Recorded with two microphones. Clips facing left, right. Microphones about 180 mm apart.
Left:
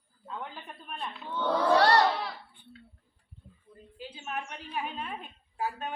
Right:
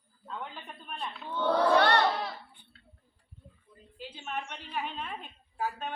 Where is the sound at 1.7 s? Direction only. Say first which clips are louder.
Left 3 dB; 35° left (ahead or behind).